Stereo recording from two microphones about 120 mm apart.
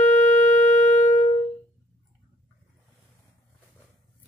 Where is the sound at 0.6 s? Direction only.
75° left (ahead or behind).